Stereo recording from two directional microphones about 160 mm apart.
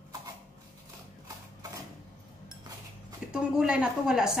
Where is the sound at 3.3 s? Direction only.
5° right (ahead or behind).